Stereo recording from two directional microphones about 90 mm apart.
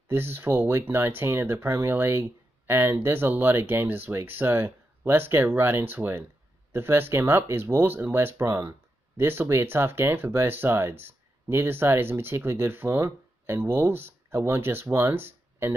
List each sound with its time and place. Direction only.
0.1 s speech: 25° right (ahead or behind)